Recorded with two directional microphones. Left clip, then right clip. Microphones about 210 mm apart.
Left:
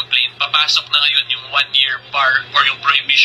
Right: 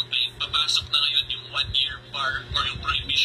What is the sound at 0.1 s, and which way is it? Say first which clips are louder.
Speech: left 13 dB; 20° left (ahead or behind).